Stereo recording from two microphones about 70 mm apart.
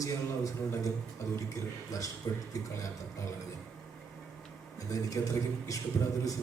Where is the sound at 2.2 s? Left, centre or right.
Left.